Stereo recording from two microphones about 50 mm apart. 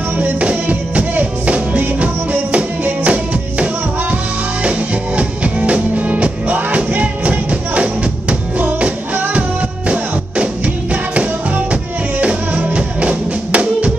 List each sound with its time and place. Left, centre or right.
0.2 s music: right
4.6 s music: right